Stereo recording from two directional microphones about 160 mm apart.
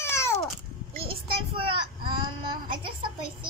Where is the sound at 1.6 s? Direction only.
30° right (ahead or behind).